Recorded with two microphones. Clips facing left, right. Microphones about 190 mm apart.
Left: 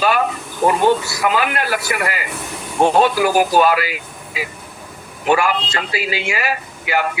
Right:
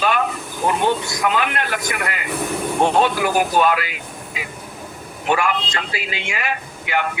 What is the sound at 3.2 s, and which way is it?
A man's voice, 5° left (ahead or behind).